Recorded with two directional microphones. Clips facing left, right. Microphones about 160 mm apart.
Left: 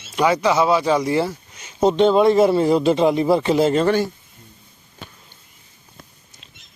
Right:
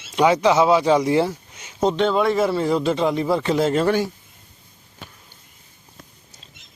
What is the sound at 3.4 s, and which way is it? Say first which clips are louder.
Speech: left 2 dB; 5° left (ahead or behind).